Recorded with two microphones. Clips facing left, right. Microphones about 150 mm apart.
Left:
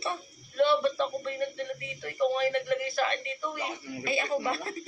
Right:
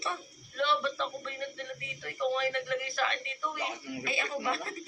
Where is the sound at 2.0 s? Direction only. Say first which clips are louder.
Left 4 dB; 40° left (ahead or behind).